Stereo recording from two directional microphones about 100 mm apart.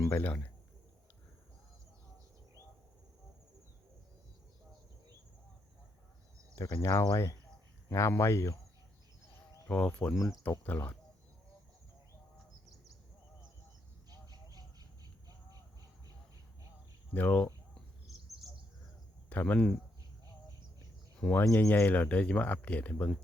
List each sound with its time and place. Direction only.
0.1 s speech: 20° left (ahead or behind)
6.7 s speech: 35° left (ahead or behind)
9.6 s speech: 10° left (ahead or behind)
14.1 s bird: 40° right (ahead or behind)
17.2 s speech: 20° left (ahead or behind)
19.3 s speech: 15° left (ahead or behind)
21.2 s speech: 15° left (ahead or behind)